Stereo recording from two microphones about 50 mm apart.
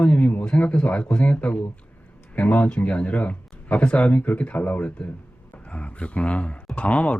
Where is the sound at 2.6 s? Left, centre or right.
Left.